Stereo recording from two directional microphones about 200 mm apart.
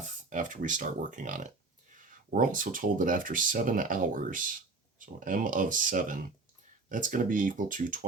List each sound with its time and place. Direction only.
0.0 s speech: 40° right (ahead or behind)